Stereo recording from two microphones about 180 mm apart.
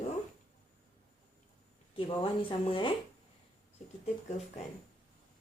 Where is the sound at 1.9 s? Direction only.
30° left (ahead or behind).